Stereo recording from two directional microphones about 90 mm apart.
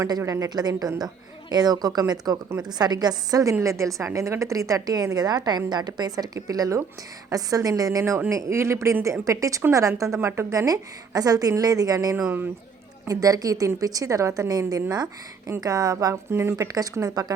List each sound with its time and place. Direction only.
0.3 s a woman's voice: 40° right (ahead or behind)
16.3 s speech: 30° right (ahead or behind)
16.7 s a woman's voice: 45° right (ahead or behind)